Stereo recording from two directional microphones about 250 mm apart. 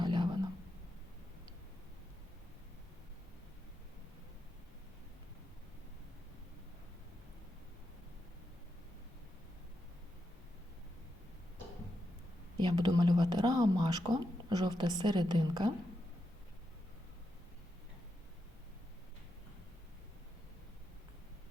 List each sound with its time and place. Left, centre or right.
0.0 s whispering: centre
12.5 s speech: centre